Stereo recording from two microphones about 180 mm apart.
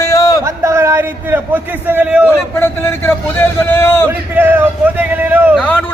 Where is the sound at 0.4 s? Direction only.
15° right (ahead or behind).